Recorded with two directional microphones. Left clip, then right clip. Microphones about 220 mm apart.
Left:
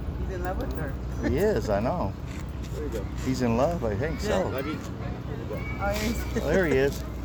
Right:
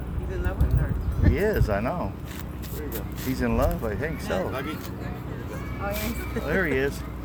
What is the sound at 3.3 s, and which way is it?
Speech, 10° left (ahead or behind).